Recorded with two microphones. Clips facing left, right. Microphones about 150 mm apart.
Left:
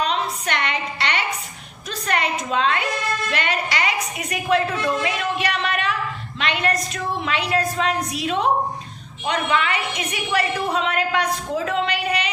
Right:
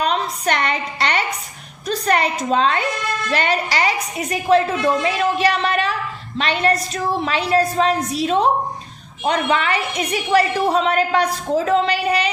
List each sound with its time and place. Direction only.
0.0 s music: 40° right (ahead or behind)
1.9 s a sound: 35° right (ahead or behind)
3.3 s a woman's voice: 35° right (ahead or behind)